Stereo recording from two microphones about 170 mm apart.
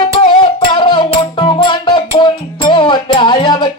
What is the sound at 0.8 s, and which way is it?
Music, 30° left (ahead or behind).